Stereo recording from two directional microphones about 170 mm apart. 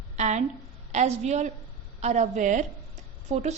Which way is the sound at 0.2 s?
45° right (ahead or behind).